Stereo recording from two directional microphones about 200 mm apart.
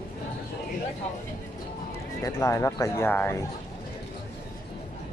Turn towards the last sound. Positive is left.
turn(degrees=10)  # may be behind; listen again after turning